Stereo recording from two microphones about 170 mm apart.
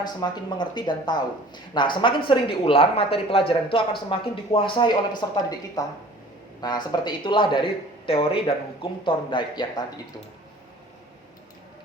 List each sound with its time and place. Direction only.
0.0 s speech: 25° left (ahead or behind)